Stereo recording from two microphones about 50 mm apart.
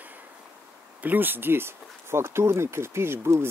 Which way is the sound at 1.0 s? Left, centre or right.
Right.